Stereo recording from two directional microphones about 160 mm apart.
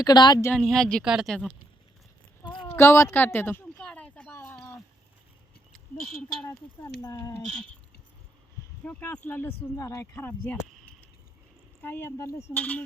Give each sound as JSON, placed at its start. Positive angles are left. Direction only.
{"t": 0.0, "sound": "speech", "side_deg": 25}
{"t": 0.5, "sound": "speech", "side_deg": 5}
{"t": 2.4, "sound": "a sound", "side_deg": 30}
{"t": 2.6, "sound": "a sound", "side_deg": 15}
{"t": 6.1, "sound": "speech", "side_deg": 5}
{"t": 8.8, "sound": "speech", "side_deg": 10}
{"t": 11.8, "sound": "speech", "side_deg": 10}